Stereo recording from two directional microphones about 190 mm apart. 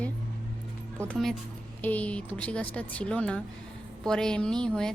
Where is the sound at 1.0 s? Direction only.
5° left (ahead or behind).